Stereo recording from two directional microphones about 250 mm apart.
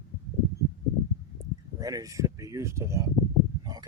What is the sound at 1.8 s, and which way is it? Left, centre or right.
Speech, centre.